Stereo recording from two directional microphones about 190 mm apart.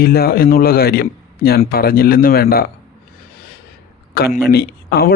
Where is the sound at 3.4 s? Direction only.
50° left (ahead or behind).